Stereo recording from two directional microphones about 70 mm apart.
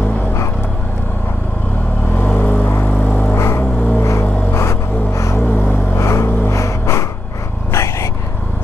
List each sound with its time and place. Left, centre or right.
2.3 s a sound: left
3.3 s music: left
4.6 s gasp: left
5.4 s vehicle: left
5.9 s vehicle: left